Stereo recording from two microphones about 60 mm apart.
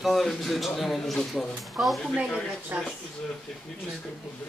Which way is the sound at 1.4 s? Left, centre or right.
Centre.